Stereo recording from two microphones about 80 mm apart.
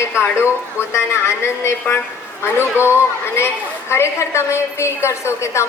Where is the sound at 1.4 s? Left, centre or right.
Left.